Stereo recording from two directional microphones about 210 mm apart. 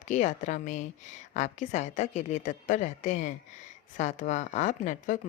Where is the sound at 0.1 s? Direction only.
35° left (ahead or behind).